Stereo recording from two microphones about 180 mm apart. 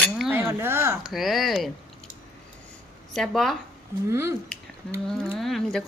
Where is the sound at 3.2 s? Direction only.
Centre (ahead or behind).